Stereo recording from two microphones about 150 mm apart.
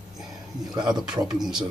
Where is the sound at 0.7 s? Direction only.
25° right (ahead or behind).